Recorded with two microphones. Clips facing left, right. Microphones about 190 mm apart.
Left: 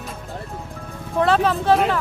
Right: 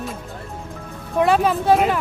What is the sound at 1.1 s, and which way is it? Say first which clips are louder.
Speech: right 1 dB; 10° right (ahead or behind).